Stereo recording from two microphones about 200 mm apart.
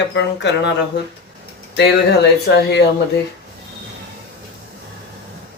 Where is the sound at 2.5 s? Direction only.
55° left (ahead or behind).